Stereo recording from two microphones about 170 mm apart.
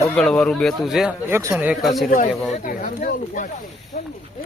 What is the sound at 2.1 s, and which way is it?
Speech, 55° left (ahead or behind).